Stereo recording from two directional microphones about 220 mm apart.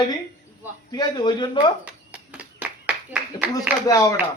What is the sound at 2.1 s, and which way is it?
Clapping, 5° right (ahead or behind).